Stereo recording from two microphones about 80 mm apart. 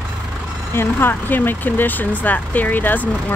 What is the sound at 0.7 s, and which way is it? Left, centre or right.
Speech, left.